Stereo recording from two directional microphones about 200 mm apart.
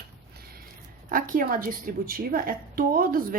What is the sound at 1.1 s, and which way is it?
A woman's voice, 45° right (ahead or behind).